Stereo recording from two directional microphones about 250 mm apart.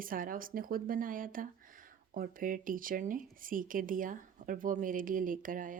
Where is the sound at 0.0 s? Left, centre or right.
Right.